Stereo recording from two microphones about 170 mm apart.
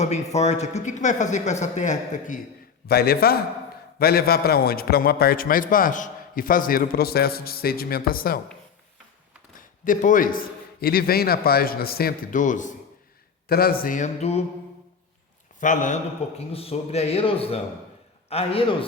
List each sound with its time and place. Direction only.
0.3 s speech: 40° left (ahead or behind)
2.8 s a man's voice: 65° left (ahead or behind)
9.8 s a man's voice: 50° left (ahead or behind)
13.5 s speech: 60° left (ahead or behind); by 14.4 s 40° left (ahead or behind)
15.6 s speech: 50° left (ahead or behind)
16.5 s speech: 35° left (ahead or behind)